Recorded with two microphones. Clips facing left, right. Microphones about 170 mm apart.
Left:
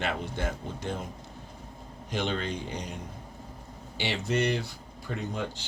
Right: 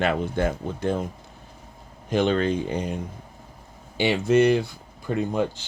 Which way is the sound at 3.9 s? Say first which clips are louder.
Right 10 dB; 55° right (ahead or behind).